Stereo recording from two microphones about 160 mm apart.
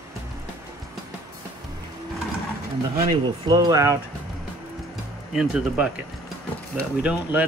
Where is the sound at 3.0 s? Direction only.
25° right (ahead or behind).